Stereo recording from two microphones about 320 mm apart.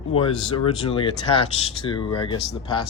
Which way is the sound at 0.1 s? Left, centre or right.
Centre.